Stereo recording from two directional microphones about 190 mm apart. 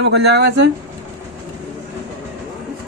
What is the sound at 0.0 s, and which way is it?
Speech, 60° right (ahead or behind).